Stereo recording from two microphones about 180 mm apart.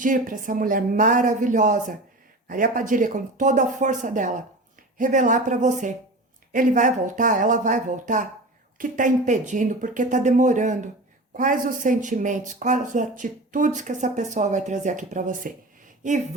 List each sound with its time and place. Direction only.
0.0 s speech: 50° right (ahead or behind)